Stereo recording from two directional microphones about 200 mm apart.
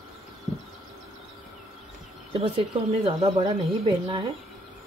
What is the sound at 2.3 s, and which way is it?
Speech, 30° right (ahead or behind).